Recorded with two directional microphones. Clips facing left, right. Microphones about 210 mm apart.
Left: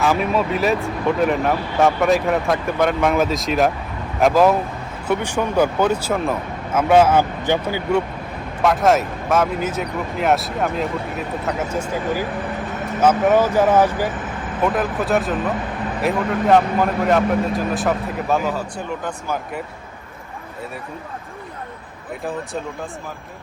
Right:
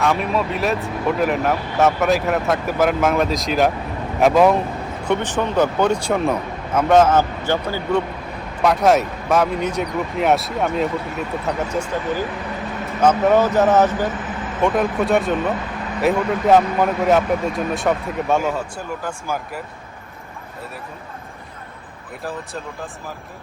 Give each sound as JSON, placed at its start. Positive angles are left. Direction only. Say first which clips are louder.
{"t": 0.0, "sound": "speech", "louder": "left 1 dB", "side_deg": 0}
{"t": 8.6, "sound": "speech", "louder": "right 1 dB", "side_deg": 0}